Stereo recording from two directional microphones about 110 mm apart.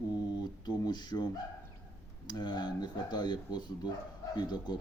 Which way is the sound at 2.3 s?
40° left (ahead or behind).